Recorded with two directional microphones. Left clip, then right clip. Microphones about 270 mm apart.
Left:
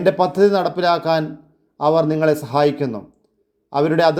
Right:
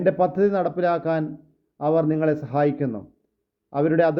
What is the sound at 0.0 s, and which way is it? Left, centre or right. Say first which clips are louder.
Speech: left 5 dB; centre.